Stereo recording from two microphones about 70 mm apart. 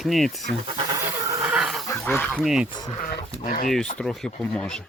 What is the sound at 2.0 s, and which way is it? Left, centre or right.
Speech, left.